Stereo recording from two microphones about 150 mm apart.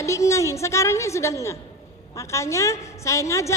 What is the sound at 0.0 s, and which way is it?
Speech, 20° left (ahead or behind).